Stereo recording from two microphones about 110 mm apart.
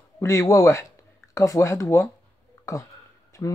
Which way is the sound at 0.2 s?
25° left (ahead or behind).